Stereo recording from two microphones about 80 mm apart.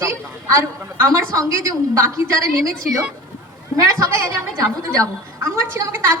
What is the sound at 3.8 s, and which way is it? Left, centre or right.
A woman's voice, right.